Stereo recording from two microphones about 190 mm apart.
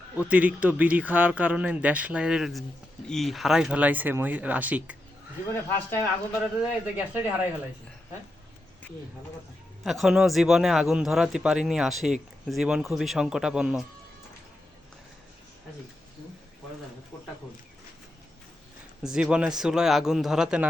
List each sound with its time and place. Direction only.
0.2 s speech: 5° right (ahead or behind)
6.4 s speech: 5° right (ahead or behind)
9.8 s speech: centre (ahead or behind)
19.0 s speech: 5° right (ahead or behind)